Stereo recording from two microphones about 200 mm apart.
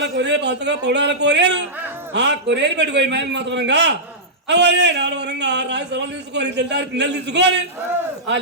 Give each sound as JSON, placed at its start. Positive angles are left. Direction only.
{"t": 0.0, "sound": "a man's voice", "side_deg": -60}